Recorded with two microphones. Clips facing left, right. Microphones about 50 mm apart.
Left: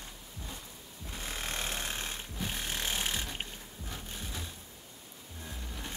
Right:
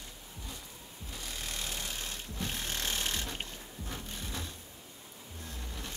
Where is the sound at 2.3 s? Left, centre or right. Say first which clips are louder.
Even; centre.